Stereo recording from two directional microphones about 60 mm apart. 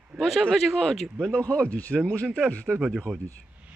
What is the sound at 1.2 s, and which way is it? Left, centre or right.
Speech, centre.